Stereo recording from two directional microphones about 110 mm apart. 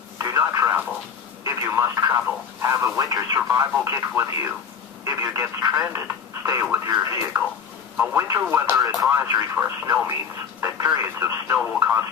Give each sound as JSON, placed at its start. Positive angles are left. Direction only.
{"t": 0.2, "sound": "radio", "side_deg": -30}
{"t": 1.4, "sound": "telephone", "side_deg": -30}
{"t": 2.6, "sound": "speech", "side_deg": -30}
{"t": 8.7, "sound": "speech", "side_deg": -30}